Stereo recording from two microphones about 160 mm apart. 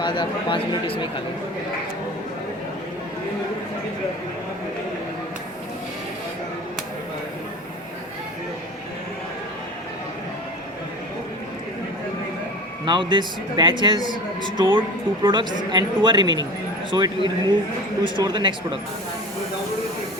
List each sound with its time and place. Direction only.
0.0 s a man's voice: 30° left (ahead or behind)
12.8 s speech: 30° right (ahead or behind)